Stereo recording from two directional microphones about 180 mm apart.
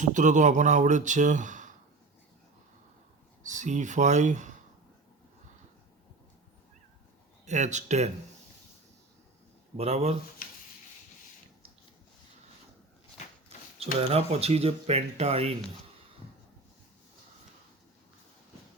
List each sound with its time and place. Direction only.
0.0 s speech: 45° right (ahead or behind)
3.4 s speech: 45° right (ahead or behind)
7.4 s speech: 40° right (ahead or behind)
9.7 s speech: 35° right (ahead or behind)
13.7 s speech: 35° right (ahead or behind)